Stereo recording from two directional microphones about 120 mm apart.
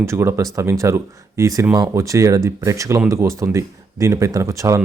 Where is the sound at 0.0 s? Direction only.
25° right (ahead or behind).